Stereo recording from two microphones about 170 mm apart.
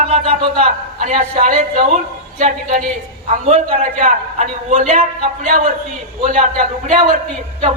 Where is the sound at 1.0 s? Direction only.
50° right (ahead or behind).